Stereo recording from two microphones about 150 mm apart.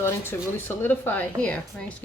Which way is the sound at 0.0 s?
15° left (ahead or behind).